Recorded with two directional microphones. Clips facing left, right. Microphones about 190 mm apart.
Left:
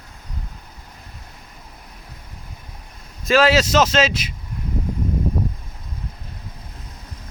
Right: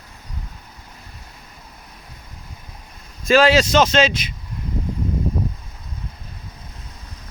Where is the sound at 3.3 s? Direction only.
5° left (ahead or behind).